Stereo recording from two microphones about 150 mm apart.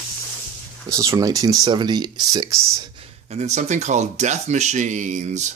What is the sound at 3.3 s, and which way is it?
Speech, 50° right (ahead or behind).